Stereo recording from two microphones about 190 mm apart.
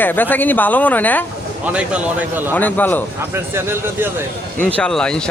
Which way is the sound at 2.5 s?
10° left (ahead or behind).